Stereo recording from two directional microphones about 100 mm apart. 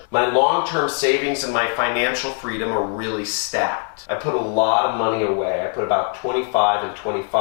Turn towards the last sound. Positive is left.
turn(degrees=15)  # may be behind; listen again after turning